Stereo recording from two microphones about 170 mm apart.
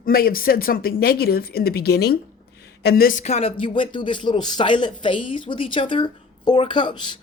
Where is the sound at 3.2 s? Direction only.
40° left (ahead or behind).